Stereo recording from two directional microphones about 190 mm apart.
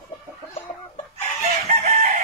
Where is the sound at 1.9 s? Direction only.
50° right (ahead or behind).